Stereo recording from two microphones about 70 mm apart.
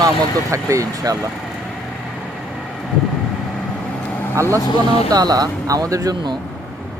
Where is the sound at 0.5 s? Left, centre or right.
Right.